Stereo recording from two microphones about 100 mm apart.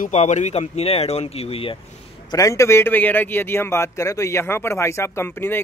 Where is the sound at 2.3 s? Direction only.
30° left (ahead or behind).